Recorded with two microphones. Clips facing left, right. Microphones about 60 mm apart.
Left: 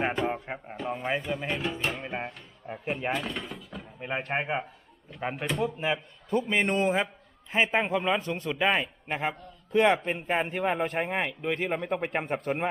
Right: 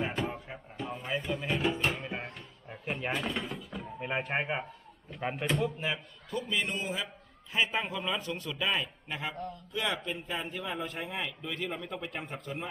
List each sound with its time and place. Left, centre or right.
0.3 s music: left
0.9 s a sound: left
1.2 s speech: centre
2.0 s speech: centre
2.9 s speech: centre
5.5 s speech: centre
6.3 s a man's voice: left
7.5 s a man's voice: left
9.7 s a man's voice: left